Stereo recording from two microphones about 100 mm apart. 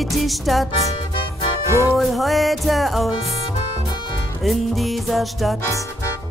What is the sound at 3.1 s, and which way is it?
Music, 90° left.